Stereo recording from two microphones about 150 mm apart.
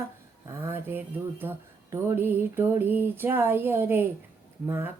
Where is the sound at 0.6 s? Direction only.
15° right (ahead or behind).